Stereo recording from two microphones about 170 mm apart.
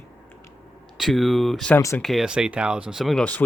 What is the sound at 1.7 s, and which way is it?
Speech, 15° left (ahead or behind).